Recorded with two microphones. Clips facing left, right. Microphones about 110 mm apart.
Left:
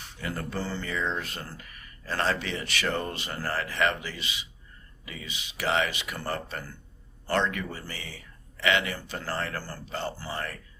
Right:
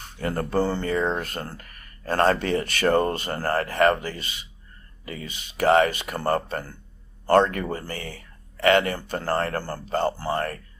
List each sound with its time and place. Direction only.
0.0 s speech: 45° right (ahead or behind)